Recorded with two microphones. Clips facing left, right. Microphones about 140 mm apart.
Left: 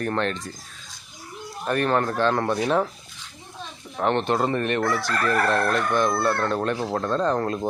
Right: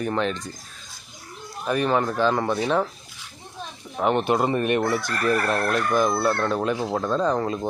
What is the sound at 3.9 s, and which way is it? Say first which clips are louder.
Speech: right 1 dB; 5° right (ahead or behind).